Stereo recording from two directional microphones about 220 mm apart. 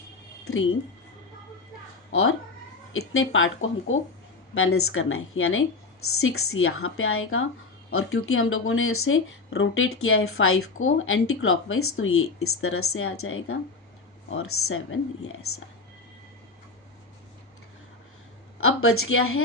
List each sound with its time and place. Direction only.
2.9 s speech: 65° left (ahead or behind)
18.6 s speech: 70° left (ahead or behind)